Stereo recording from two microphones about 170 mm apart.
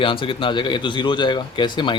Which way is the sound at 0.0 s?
30° left (ahead or behind).